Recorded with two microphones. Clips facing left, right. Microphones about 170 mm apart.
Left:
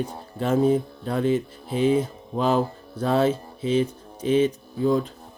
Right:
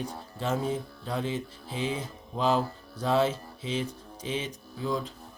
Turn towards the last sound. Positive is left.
turn(degrees=55)  # may be behind; listen again after turning